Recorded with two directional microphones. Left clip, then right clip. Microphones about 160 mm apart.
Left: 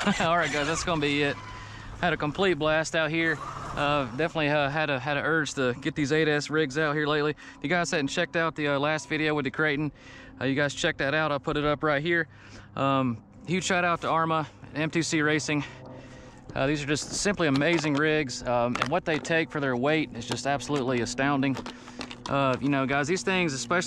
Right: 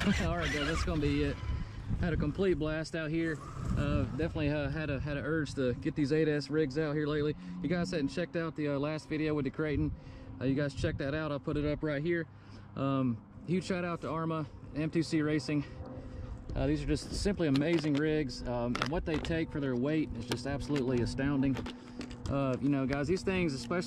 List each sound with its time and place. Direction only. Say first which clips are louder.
0.4 s speech: left 7 dB; centre (ahead or behind)
0.8 s speech: left 8 dB; 15° right (ahead or behind)
11.6 s speech: left 11 dB; 45° left (ahead or behind)
12.0 s speech: left 8 dB; 15° right (ahead or behind)
18.7 s speech: left 7 dB; centre (ahead or behind)
19.3 s speech: left 8 dB; 15° right (ahead or behind)